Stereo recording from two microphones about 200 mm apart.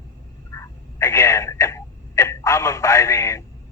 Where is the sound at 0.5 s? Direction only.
15° left (ahead or behind).